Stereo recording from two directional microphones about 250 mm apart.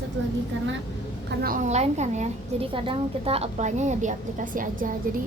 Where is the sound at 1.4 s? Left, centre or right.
Right.